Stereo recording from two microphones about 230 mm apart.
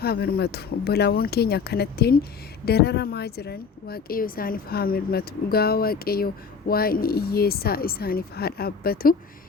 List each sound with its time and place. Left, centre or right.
0.0 s a woman's voice: left